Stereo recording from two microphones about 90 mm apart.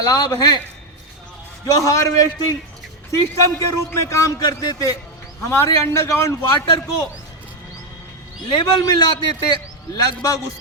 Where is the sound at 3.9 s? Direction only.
40° left (ahead or behind).